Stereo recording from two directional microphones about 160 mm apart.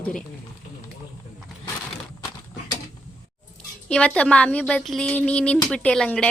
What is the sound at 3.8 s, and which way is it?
Speech, 5° left (ahead or behind).